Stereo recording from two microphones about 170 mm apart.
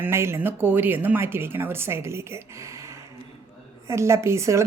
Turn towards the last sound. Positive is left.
turn(degrees=-15)  # may be behind; listen again after turning